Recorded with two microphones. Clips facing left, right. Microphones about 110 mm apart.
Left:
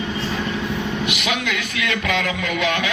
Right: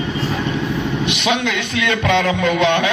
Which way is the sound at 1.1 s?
30° right (ahead or behind).